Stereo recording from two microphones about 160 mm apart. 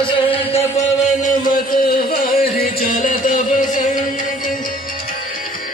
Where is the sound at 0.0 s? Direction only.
35° left (ahead or behind).